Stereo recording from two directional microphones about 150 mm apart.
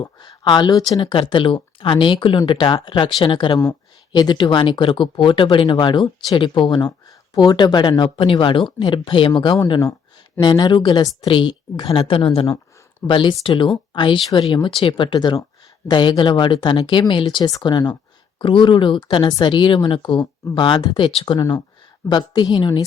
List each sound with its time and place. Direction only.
0.0 s speech: 30° left (ahead or behind)
21.3 s a woman's voice: 25° left (ahead or behind)